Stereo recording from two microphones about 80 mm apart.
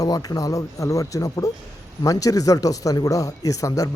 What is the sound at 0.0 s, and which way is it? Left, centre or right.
Speech, left.